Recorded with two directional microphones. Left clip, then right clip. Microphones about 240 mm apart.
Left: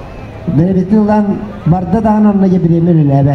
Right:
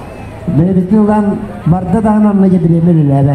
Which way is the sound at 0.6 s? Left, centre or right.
Left.